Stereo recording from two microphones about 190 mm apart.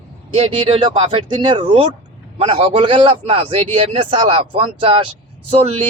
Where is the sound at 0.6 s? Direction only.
30° right (ahead or behind).